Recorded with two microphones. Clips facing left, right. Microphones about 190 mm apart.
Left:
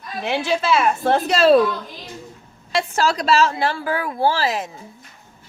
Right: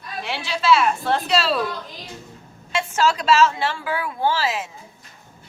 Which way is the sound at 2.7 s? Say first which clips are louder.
Left 1 dB; 35° left (ahead or behind).